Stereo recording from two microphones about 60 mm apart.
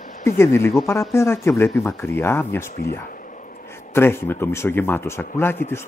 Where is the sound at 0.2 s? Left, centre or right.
Left.